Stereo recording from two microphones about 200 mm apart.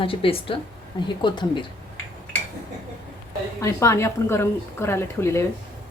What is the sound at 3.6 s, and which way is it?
Speech, 15° left (ahead or behind).